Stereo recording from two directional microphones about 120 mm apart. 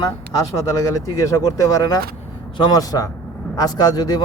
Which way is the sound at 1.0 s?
25° left (ahead or behind).